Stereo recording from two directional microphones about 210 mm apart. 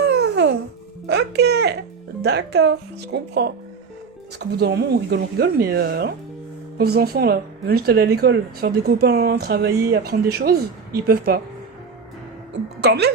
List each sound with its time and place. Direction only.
0.1 s babbling: 55° right (ahead or behind)
1.0 s speech: 50° right (ahead or behind)
12.8 s speech: 50° right (ahead or behind)